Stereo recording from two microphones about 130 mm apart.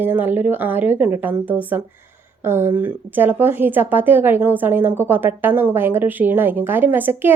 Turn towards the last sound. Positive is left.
turn(degrees=-15)  # may be behind; listen again after turning